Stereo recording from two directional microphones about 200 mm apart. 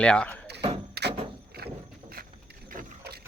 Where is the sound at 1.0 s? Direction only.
55° right (ahead or behind).